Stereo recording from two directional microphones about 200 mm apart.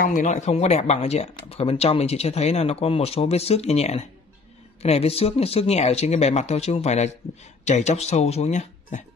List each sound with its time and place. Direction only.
0.0 s speech: 40° left (ahead or behind)